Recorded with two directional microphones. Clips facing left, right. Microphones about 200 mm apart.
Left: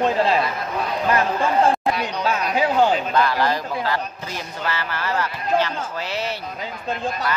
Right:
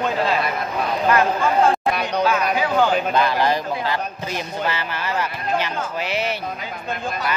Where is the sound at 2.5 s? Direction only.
30° left (ahead or behind).